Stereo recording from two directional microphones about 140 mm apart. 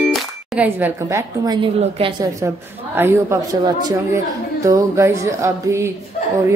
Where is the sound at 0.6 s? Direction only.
15° right (ahead or behind); by 1.7 s 30° right (ahead or behind).